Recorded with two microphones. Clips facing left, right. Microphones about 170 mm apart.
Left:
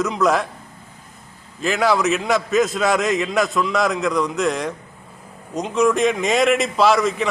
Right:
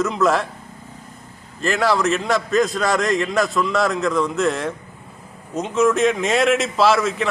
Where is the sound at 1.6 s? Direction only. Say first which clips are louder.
Even; centre (ahead or behind).